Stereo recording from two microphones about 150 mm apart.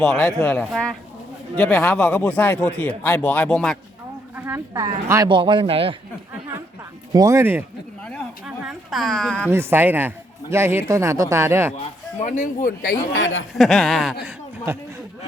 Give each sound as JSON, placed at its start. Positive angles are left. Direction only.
{"t": 0.0, "sound": "speech", "side_deg": 5}
{"t": 4.4, "sound": "speech", "side_deg": -15}
{"t": 5.3, "sound": "speech", "side_deg": -30}
{"t": 7.1, "sound": "speech", "side_deg": -25}
{"t": 8.4, "sound": "speech", "side_deg": -5}
{"t": 9.5, "sound": "speech", "side_deg": -15}
{"t": 11.8, "sound": "speech", "side_deg": 50}
{"t": 13.5, "sound": "speech", "side_deg": 0}
{"t": 14.7, "sound": "speech", "side_deg": -15}